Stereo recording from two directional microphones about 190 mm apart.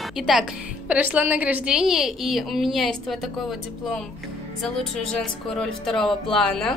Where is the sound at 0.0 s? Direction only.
5° right (ahead or behind).